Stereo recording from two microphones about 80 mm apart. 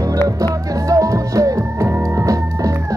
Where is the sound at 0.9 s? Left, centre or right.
Right.